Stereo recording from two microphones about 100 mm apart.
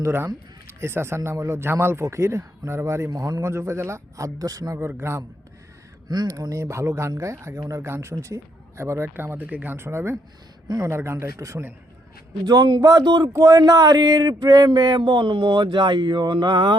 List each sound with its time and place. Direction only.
0.0 s a man's voice: 25° right (ahead or behind)
6.1 s a man's voice: 40° right (ahead or behind)
12.5 s a man's voice: 45° right (ahead or behind)